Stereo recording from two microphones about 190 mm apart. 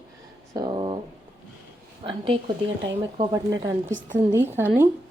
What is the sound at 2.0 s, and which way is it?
A woman's voice, 30° right (ahead or behind).